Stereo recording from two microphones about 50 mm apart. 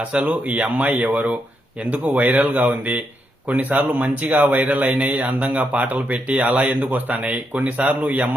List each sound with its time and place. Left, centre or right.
0.0 s speech: right